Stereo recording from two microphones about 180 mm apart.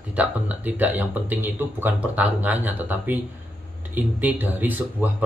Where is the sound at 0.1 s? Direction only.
10° right (ahead or behind).